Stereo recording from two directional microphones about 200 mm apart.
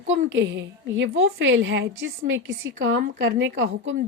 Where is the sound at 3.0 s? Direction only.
55° right (ahead or behind).